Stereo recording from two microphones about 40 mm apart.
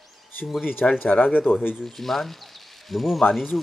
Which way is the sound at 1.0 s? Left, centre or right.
Left.